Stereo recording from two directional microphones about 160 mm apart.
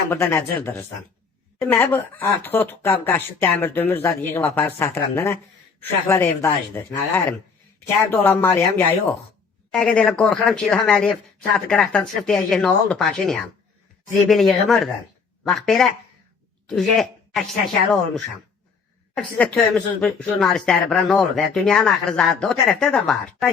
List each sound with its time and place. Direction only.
0.1 s speech: 15° left (ahead or behind)